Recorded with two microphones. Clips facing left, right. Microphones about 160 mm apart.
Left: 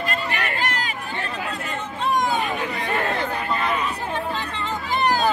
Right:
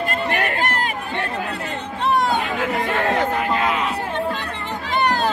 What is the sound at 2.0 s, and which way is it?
Chatter, 65° right (ahead or behind).